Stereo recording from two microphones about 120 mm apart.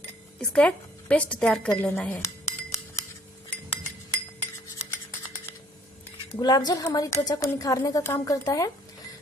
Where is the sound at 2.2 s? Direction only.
25° left (ahead or behind).